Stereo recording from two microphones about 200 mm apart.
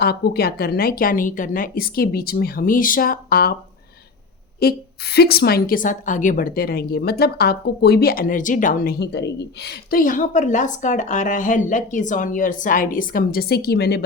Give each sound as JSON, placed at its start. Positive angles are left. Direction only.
{"t": 0.0, "sound": "a woman's voice", "side_deg": 50}
{"t": 4.6, "sound": "a woman's voice", "side_deg": 50}